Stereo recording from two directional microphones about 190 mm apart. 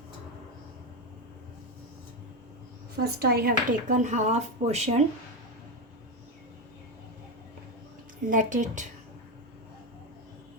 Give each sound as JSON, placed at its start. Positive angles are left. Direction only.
{"t": 2.9, "sound": "speech", "side_deg": -55}
{"t": 8.3, "sound": "speech", "side_deg": -40}